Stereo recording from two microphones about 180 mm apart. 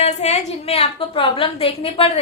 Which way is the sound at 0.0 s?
40° left (ahead or behind).